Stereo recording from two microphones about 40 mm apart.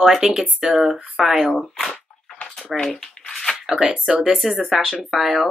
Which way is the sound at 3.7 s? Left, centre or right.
Centre.